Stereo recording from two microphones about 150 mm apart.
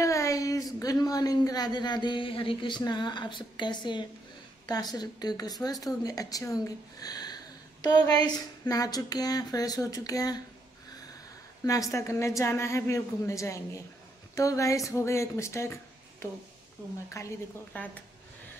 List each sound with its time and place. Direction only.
0.0 s a woman's voice: 20° left (ahead or behind)
11.6 s a woman's voice: 20° left (ahead or behind)
17.1 s a woman's voice: 20° left (ahead or behind)